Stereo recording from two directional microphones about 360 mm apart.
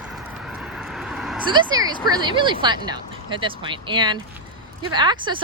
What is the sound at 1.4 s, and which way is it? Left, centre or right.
Speech, centre.